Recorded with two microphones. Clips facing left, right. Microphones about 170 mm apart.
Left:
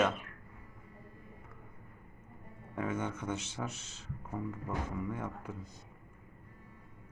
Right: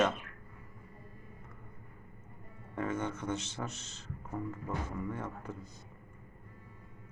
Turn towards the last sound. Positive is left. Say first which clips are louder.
# even
turn(degrees=10)  # may be behind; listen again after turning